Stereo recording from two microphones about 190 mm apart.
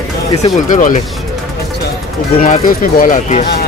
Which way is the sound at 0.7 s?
40° left (ahead or behind).